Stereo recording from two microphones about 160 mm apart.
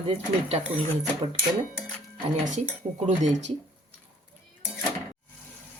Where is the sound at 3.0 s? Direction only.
45° right (ahead or behind).